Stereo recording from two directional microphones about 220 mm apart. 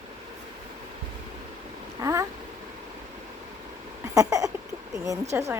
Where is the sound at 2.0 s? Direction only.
15° right (ahead or behind).